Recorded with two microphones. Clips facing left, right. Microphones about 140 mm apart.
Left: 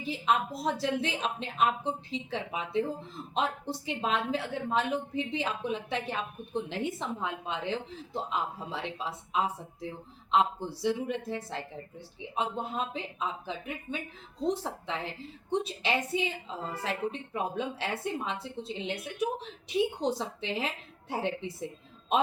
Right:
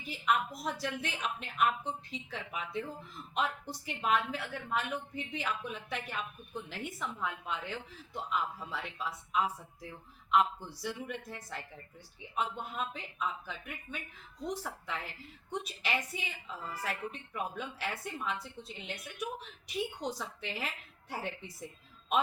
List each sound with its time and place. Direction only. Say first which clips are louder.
0.0 s a woman's voice: left 3 dB; 30° left (ahead or behind)